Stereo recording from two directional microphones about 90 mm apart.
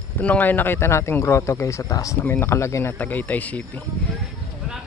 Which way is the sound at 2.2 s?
25° left (ahead or behind).